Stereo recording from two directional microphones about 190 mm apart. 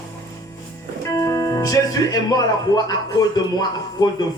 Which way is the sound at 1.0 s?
15° left (ahead or behind).